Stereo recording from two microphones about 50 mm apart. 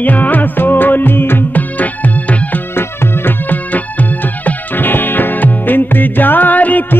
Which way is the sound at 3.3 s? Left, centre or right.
Left.